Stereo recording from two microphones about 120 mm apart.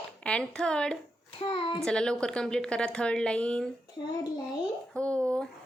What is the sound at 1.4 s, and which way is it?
Speech, 45° left (ahead or behind).